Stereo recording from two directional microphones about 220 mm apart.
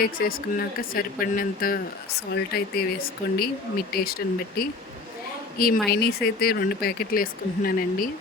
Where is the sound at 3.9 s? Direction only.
45° left (ahead or behind).